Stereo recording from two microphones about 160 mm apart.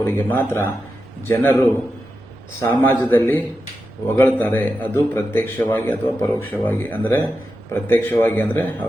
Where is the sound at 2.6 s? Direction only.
15° left (ahead or behind).